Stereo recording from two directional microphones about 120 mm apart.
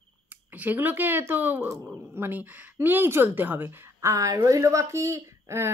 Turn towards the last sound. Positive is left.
turn(degrees=-20)  # may be behind; listen again after turning